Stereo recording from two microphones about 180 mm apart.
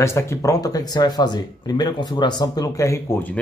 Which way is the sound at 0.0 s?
15° left (ahead or behind).